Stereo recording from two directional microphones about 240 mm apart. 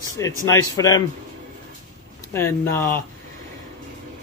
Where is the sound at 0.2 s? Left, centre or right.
Centre.